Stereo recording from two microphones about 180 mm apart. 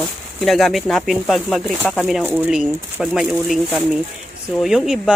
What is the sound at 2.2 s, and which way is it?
Speech, 10° right (ahead or behind).